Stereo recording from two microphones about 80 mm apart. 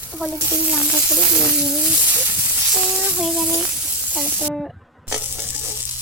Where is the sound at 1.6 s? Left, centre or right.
Centre.